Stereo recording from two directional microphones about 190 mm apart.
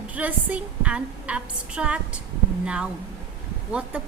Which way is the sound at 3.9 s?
5° right (ahead or behind).